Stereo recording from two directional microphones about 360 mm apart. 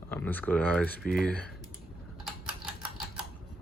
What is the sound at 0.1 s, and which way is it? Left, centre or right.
Speech, centre.